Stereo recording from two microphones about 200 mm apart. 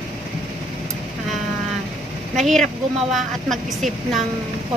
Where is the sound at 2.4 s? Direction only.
Centre (ahead or behind).